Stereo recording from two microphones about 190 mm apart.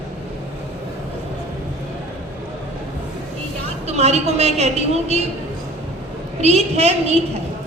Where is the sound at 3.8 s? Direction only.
35° right (ahead or behind).